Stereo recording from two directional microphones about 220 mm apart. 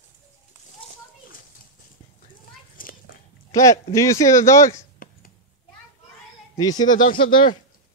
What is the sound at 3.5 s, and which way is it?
Speech, 15° left (ahead or behind).